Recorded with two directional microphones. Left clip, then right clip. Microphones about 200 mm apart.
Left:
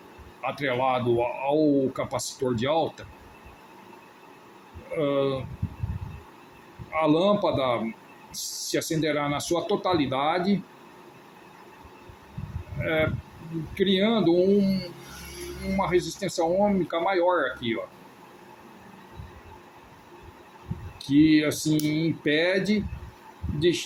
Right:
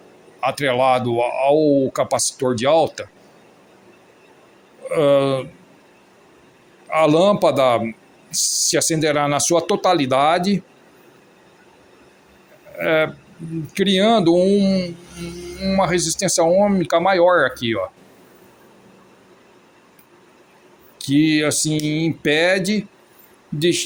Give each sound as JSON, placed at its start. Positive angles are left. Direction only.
{"t": 0.4, "sound": "speech", "side_deg": -50}
{"t": 4.9, "sound": "speech", "side_deg": -55}
{"t": 6.9, "sound": "speech", "side_deg": -55}
{"t": 12.8, "sound": "speech", "side_deg": -55}
{"t": 21.0, "sound": "speech", "side_deg": -55}